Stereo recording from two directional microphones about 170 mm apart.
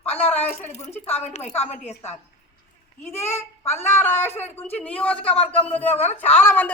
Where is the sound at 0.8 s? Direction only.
15° left (ahead or behind).